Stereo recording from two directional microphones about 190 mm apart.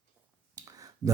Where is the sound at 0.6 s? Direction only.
20° right (ahead or behind).